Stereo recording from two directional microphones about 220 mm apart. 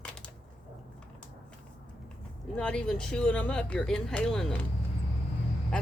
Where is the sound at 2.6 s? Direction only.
5° left (ahead or behind).